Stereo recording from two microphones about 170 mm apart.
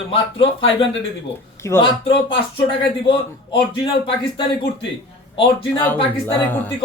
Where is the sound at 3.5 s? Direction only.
30° left (ahead or behind).